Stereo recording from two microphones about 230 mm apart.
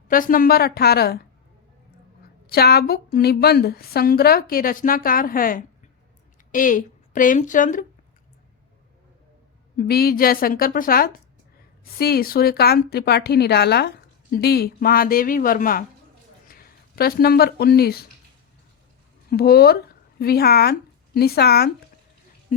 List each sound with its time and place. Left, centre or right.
0.1 s a woman's voice: left
2.5 s a woman's voice: left
9.7 s a woman's voice: left
19.3 s speech: left